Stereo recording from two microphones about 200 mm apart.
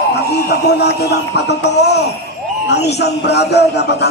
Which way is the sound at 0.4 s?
55° left (ahead or behind).